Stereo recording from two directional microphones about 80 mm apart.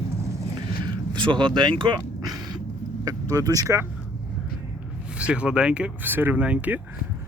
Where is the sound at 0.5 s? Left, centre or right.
Right.